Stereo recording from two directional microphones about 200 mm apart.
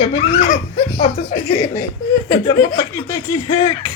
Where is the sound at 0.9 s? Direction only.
35° left (ahead or behind).